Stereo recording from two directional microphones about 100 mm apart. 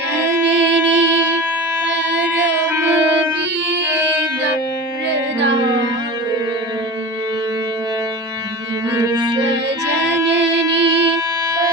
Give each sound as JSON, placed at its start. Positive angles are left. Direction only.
{"t": 0.3, "sound": "music", "side_deg": -20}
{"t": 9.1, "sound": "music", "side_deg": -45}